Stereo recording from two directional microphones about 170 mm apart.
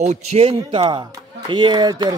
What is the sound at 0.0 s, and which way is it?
A man's voice, 40° right (ahead or behind).